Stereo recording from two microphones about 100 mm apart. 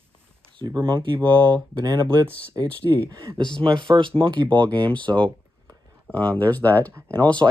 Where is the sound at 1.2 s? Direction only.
50° right (ahead or behind).